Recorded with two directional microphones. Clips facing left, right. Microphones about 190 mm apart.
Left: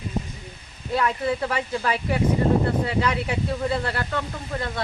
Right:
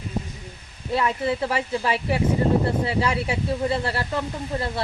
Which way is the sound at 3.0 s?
30° right (ahead or behind).